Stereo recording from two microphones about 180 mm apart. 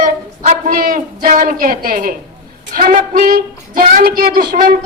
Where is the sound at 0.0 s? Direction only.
45° right (ahead or behind).